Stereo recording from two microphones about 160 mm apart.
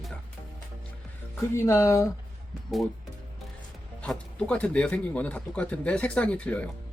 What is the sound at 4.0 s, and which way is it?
Speech, 10° left (ahead or behind).